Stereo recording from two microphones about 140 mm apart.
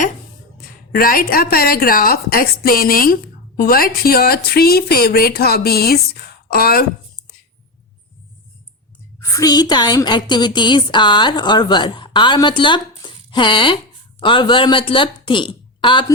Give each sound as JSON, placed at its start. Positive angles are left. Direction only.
{"t": 0.9, "sound": "speech", "side_deg": 90}
{"t": 9.2, "sound": "a woman's voice", "side_deg": 25}
{"t": 13.0, "sound": "a sound", "side_deg": 35}
{"t": 14.2, "sound": "speech", "side_deg": 35}